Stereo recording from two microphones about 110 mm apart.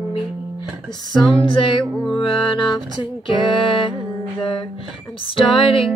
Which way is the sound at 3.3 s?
50° left (ahead or behind).